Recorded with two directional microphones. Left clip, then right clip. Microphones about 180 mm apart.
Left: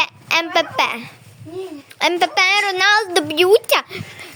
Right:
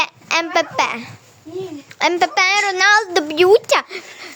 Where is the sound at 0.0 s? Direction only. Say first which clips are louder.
Left 1 dB; centre (ahead or behind).